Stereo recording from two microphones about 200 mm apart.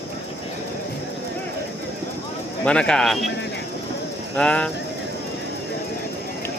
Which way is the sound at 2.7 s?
5° left (ahead or behind).